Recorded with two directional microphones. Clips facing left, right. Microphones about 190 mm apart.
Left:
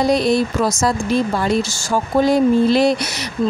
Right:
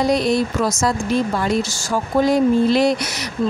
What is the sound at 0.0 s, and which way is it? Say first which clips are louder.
Speech: left 2 dB; 30° left (ahead or behind).